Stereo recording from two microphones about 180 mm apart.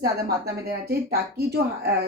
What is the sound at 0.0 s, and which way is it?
Speech, 60° right (ahead or behind).